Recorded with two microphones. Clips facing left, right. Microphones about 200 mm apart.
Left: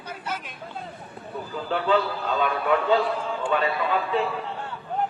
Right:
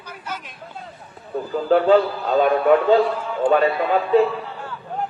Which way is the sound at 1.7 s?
45° right (ahead or behind).